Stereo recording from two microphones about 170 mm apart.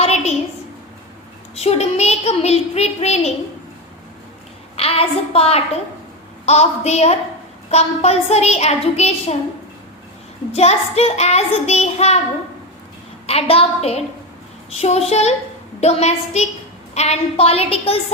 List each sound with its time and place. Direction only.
0.0 s a sound: 40° left (ahead or behind)
1.5 s a child's voice: 40° left (ahead or behind)
4.8 s a woman's voice: 35° left (ahead or behind)
10.5 s a child's voice: 40° left (ahead or behind)
13.2 s a child's voice: 35° left (ahead or behind)